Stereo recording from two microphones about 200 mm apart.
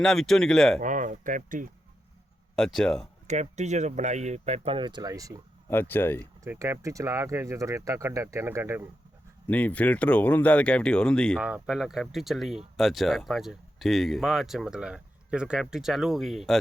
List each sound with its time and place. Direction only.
0.0 s speech: centre (ahead or behind)
0.8 s speech: 40° right (ahead or behind)
2.6 s speech: centre (ahead or behind)
3.2 s speech: 35° right (ahead or behind); by 5.4 s 15° right (ahead or behind)
5.6 s speech: 10° left (ahead or behind)
6.4 s speech: 15° right (ahead or behind)
9.5 s speech: 5° left (ahead or behind)